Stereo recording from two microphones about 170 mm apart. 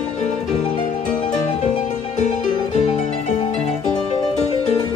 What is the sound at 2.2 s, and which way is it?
Music, 45° left (ahead or behind).